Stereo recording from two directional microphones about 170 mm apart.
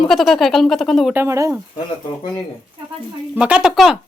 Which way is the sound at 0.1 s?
Centre (ahead or behind).